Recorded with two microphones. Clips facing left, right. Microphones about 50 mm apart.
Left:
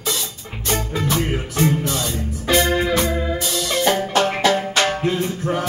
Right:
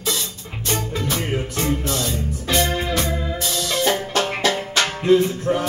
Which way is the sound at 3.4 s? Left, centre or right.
Centre.